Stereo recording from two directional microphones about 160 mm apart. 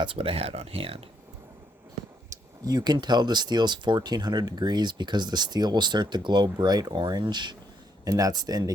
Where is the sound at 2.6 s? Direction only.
25° right (ahead or behind).